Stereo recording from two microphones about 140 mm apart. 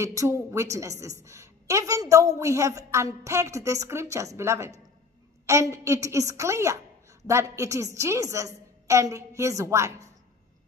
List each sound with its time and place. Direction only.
0.0 s a woman's voice: 20° right (ahead or behind)